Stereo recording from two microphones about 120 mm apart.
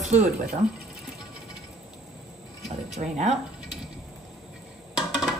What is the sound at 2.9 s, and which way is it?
Speech, 70° right (ahead or behind).